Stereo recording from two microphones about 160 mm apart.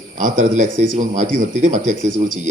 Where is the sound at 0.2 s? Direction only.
50° right (ahead or behind).